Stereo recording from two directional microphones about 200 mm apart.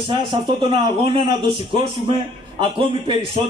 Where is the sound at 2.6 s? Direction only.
25° right (ahead or behind).